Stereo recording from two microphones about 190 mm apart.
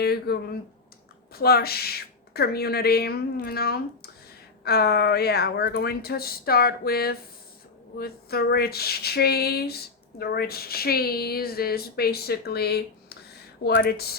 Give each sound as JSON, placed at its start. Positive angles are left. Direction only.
{"t": 0.0, "sound": "speech", "side_deg": 55}